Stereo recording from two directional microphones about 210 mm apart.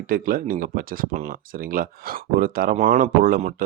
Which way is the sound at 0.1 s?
45° right (ahead or behind).